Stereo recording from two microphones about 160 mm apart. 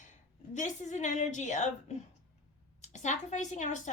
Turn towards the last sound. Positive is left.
turn(degrees=50)  # may be behind; listen again after turning